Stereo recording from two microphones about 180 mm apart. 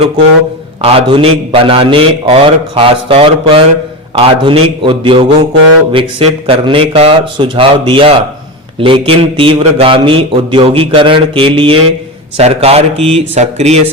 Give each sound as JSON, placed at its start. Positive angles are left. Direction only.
{"t": 0.8, "sound": "a man's voice", "side_deg": -30}